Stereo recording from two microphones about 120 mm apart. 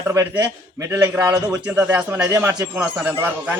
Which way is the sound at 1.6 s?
15° right (ahead or behind).